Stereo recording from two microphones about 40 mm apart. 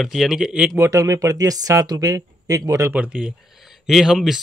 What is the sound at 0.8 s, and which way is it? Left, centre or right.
Speech, right.